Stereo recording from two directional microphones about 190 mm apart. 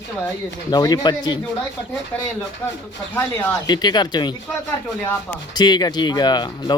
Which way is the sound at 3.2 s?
20° left (ahead or behind).